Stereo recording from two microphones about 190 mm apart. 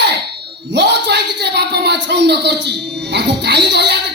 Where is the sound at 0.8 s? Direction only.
60° right (ahead or behind).